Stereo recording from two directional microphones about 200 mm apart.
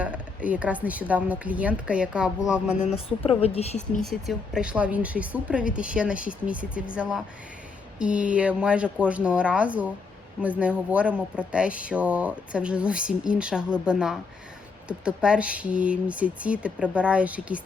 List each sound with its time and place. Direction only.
0.0 s speech: 5° right (ahead or behind)
3.2 s a woman's voice: 30° left (ahead or behind)
3.8 s speech: 5° left (ahead or behind)